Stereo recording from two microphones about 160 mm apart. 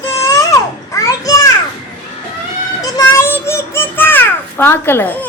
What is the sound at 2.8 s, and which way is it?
Child singing, 20° left (ahead or behind).